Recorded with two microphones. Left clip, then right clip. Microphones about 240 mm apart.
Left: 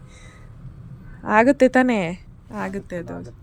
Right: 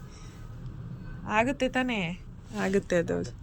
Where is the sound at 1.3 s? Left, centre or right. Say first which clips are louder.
Left 11 dB; left.